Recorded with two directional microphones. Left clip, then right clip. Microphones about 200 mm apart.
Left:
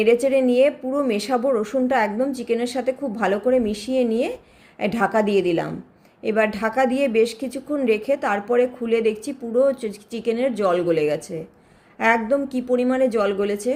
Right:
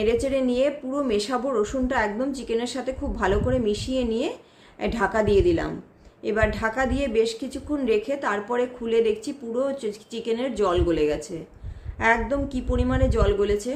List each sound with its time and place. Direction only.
0.0 s a woman's voice: 15° left (ahead or behind)